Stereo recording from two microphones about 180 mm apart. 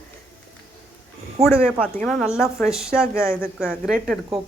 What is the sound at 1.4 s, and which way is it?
Speech, 35° right (ahead or behind).